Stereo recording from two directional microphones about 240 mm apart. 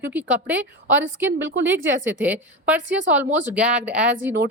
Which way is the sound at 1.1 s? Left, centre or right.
Right.